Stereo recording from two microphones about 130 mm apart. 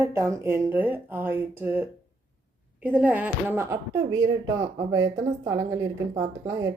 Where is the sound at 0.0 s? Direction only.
25° right (ahead or behind).